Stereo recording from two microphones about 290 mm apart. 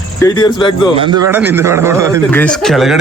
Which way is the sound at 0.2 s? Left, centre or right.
Centre.